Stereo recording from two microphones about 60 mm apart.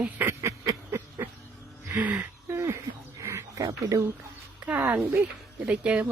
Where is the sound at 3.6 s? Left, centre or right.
Right.